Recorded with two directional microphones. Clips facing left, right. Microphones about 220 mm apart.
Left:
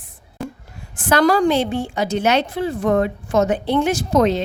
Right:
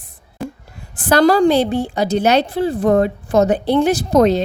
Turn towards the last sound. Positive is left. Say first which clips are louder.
# right 3 dB
turn(degrees=-40)  # may be behind; listen again after turning